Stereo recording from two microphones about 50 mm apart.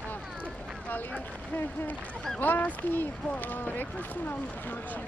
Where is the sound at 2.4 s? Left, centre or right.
Left.